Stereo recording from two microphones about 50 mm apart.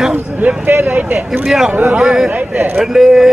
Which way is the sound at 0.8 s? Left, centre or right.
Right.